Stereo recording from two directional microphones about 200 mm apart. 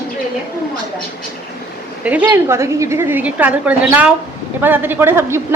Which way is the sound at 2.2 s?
15° right (ahead or behind).